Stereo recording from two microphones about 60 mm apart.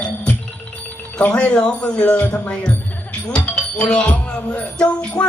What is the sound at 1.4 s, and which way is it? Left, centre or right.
Music, left.